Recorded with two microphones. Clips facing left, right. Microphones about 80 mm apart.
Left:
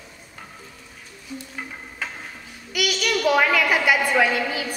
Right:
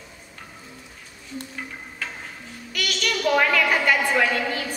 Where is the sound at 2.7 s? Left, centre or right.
Centre.